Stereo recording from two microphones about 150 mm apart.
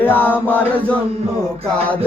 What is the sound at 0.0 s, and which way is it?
Music, 10° left (ahead or behind).